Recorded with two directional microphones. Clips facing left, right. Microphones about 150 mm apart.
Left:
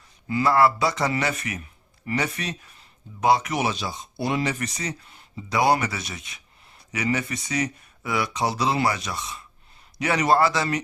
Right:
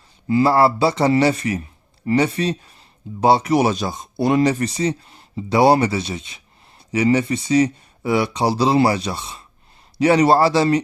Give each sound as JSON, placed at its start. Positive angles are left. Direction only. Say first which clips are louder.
{"t": 0.3, "sound": "speech", "louder": "right 5 dB", "side_deg": -30}